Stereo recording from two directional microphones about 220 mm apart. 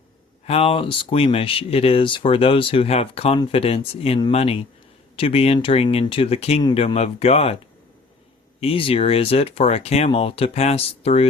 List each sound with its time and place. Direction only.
0.4 s speech: 25° left (ahead or behind)
8.6 s speech: 25° left (ahead or behind)